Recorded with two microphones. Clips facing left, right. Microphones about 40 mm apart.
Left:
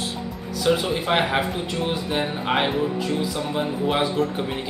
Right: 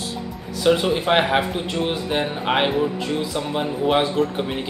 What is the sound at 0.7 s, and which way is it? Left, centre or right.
Speech, centre.